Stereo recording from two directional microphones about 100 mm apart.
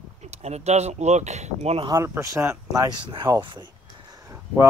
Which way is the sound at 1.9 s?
30° right (ahead or behind).